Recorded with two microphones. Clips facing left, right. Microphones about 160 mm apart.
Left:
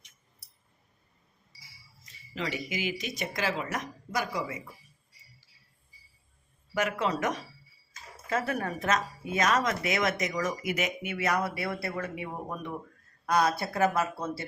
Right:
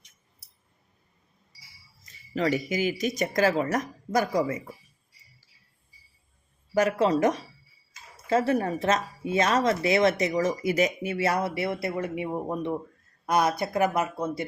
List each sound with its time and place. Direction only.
2.3 s speech: 45° right (ahead or behind)
6.7 s speech: 35° right (ahead or behind); by 14.4 s 15° right (ahead or behind)